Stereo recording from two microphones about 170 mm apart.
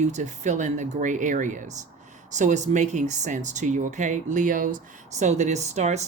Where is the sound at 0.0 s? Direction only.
45° right (ahead or behind).